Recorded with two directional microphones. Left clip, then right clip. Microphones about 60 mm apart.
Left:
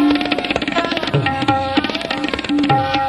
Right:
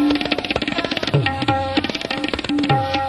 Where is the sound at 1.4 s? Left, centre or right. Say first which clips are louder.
Left 3 dB; right.